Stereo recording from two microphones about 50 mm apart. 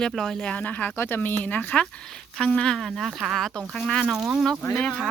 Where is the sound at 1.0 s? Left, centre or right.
Left.